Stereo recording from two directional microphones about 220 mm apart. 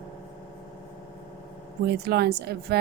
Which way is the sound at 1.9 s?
45° right (ahead or behind).